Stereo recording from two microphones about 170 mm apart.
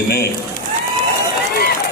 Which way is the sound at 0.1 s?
65° left (ahead or behind).